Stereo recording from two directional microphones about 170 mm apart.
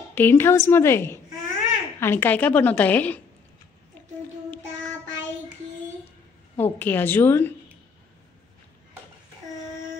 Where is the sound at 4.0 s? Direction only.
10° left (ahead or behind).